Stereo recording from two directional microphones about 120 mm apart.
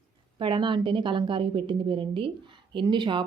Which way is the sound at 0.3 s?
40° right (ahead or behind).